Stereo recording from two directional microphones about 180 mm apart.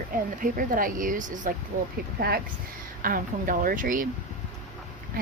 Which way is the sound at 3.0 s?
50° right (ahead or behind).